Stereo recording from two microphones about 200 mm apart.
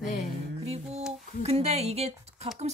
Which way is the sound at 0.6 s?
30° right (ahead or behind).